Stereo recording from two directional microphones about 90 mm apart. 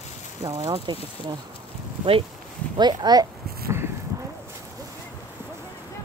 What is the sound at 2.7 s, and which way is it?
Speech, 50° right (ahead or behind).